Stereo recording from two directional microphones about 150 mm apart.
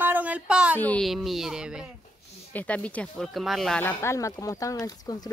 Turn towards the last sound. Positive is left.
turn(degrees=25)  # may be behind; listen again after turning